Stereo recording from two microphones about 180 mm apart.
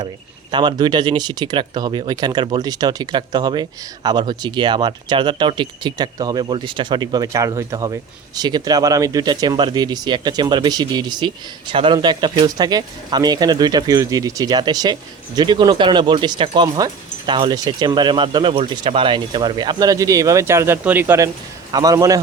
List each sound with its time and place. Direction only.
0.5 s speech: 25° right (ahead or behind)